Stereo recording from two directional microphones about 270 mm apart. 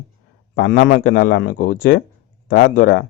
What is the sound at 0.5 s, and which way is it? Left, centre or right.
Speech, left.